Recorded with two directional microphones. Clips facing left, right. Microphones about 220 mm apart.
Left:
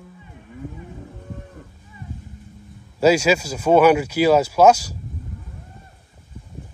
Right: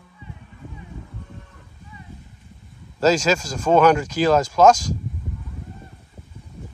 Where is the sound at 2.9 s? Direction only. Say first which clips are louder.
Left 2 dB; 10° left (ahead or behind).